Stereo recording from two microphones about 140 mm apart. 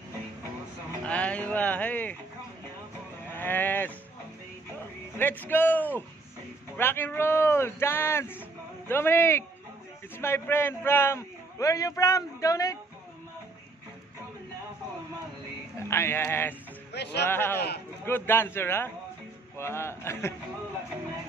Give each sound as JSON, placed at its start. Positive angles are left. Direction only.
{"t": 1.0, "sound": "speech", "side_deg": 10}
{"t": 3.3, "sound": "a sound", "side_deg": 15}
{"t": 5.1, "sound": "a man's voice", "side_deg": 10}
{"t": 15.9, "sound": "a man's voice", "side_deg": 15}